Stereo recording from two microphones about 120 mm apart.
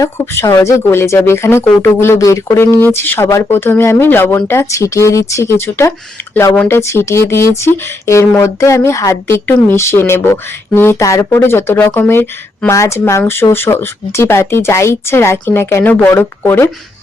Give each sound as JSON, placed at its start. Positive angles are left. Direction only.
{"t": 0.0, "sound": "speech", "side_deg": 25}